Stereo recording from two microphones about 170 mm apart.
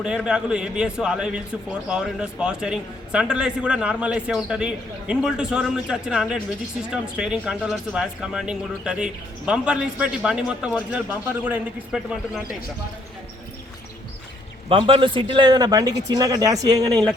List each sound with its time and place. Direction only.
0.0 s a man's voice: 5° right (ahead or behind)
14.7 s speech: 35° right (ahead or behind)